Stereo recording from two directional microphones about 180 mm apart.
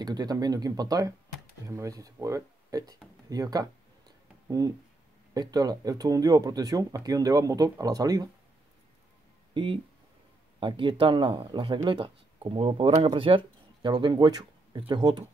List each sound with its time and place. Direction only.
0.0 s speech: 20° right (ahead or behind)
9.5 s speech: 30° right (ahead or behind)